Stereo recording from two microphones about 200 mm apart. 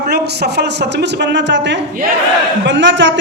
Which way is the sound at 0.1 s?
55° right (ahead or behind).